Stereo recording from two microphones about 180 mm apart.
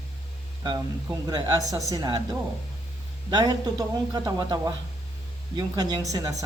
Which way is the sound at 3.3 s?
20° right (ahead or behind).